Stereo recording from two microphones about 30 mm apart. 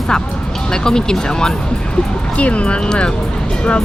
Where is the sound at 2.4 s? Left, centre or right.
Left.